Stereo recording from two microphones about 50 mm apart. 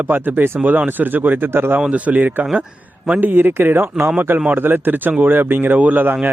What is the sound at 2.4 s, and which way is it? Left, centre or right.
Speech, right.